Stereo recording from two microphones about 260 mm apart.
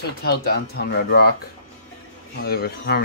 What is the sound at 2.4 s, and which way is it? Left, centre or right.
Speech, left.